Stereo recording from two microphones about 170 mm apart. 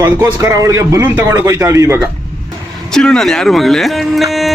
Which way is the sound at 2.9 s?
5° left (ahead or behind).